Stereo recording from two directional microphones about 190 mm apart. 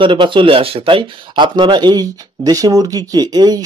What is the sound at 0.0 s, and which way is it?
Speech, 25° right (ahead or behind).